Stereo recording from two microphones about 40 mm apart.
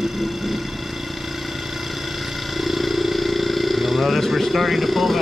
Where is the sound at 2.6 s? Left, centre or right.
Centre.